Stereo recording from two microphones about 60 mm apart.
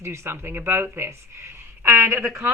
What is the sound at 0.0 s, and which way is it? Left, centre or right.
Speech, right.